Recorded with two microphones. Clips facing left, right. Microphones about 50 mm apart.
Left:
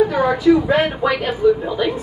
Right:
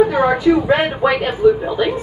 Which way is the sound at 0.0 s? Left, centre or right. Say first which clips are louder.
Right 2 dB; right.